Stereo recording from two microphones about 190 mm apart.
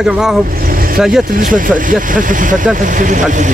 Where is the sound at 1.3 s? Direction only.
45° right (ahead or behind).